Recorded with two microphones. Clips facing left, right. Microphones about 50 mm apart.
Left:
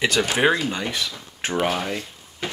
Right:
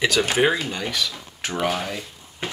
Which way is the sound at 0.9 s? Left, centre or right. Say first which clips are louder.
Right 1 dB; left.